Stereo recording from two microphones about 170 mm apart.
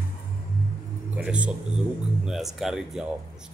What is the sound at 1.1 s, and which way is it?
Speech, 10° right (ahead or behind).